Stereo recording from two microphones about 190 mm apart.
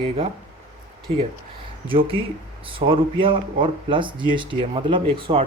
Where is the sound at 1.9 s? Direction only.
30° right (ahead or behind).